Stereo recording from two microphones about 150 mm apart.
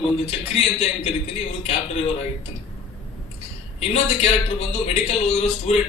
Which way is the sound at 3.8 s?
45° left (ahead or behind).